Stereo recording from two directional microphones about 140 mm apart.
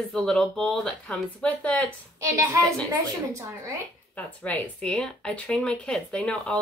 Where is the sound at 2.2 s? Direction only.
20° right (ahead or behind).